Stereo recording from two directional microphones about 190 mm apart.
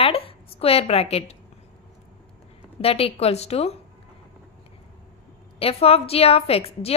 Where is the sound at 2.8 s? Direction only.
30° left (ahead or behind).